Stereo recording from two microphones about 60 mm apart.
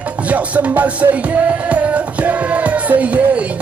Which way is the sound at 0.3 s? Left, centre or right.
Right.